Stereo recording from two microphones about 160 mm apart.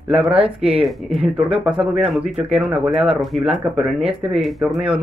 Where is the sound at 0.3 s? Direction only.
35° right (ahead or behind).